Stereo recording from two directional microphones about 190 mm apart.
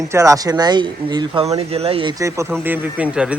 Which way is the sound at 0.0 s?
15° right (ahead or behind).